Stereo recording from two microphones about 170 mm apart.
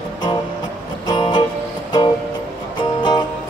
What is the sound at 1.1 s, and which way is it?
Music, 25° left (ahead or behind).